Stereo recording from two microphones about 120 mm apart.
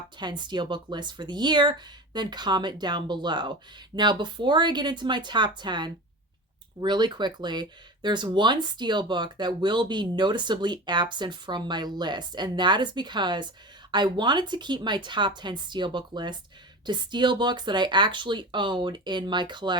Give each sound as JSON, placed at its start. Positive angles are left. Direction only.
{"t": 0.2, "sound": "speech", "side_deg": -40}